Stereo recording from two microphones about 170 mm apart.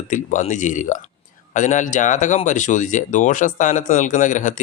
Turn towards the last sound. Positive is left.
turn(degrees=45)  # may be behind; listen again after turning